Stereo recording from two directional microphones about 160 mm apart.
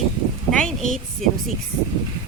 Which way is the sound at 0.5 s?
5° left (ahead or behind).